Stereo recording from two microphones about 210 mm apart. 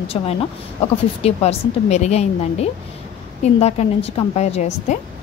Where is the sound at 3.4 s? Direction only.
30° left (ahead or behind).